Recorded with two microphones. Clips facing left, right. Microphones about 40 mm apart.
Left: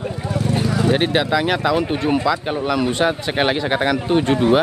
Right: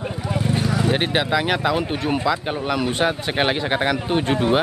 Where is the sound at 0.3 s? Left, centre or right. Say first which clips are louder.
Left 1 dB; right.